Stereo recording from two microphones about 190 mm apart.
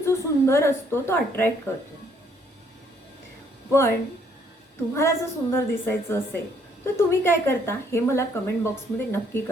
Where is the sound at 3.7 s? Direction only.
15° left (ahead or behind).